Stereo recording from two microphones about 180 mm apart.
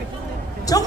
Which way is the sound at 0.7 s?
20° left (ahead or behind).